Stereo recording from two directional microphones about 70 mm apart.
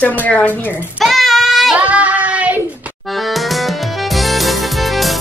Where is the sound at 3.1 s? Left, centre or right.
Centre.